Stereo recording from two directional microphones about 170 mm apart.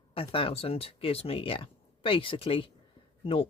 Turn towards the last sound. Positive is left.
turn(degrees=35)  # may be behind; listen again after turning